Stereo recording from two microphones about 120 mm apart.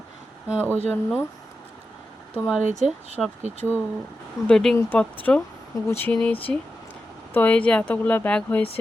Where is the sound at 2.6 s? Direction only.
90° right.